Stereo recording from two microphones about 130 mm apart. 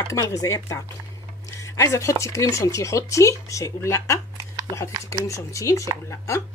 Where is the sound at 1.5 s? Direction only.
25° left (ahead or behind).